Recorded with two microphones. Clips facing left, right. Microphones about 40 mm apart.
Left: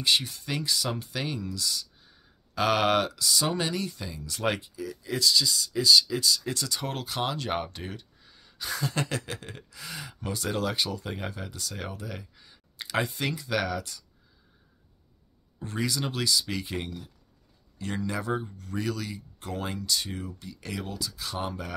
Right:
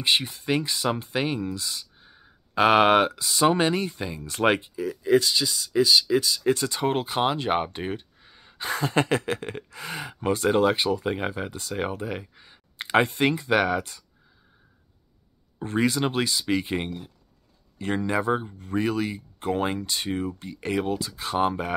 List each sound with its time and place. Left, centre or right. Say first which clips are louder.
0.0 s speech: right 2 dB; right
15.6 s speech: right 7 dB; right